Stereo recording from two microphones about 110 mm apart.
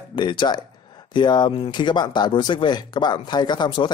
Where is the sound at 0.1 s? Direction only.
45° left (ahead or behind).